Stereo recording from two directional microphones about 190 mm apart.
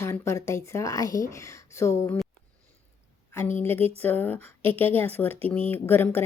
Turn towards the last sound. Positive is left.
turn(degrees=10)  # may be behind; listen again after turning